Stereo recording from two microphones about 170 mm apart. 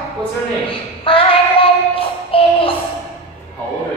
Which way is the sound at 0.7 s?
30° left (ahead or behind).